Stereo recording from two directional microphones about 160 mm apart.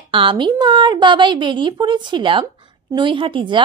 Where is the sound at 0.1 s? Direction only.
30° right (ahead or behind).